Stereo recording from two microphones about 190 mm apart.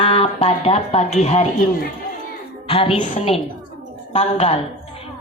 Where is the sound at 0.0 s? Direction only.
30° left (ahead or behind).